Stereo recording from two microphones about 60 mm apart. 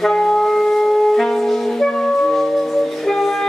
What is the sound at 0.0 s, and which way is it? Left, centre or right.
Music, centre.